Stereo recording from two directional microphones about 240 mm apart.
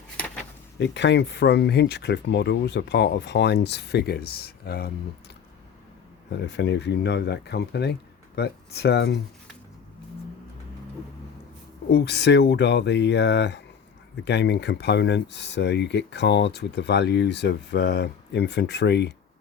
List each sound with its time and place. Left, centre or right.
0.8 s speech: left
6.3 s speech: left
11.9 s speech: left